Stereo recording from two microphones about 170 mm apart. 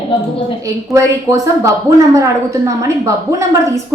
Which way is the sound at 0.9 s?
15° right (ahead or behind).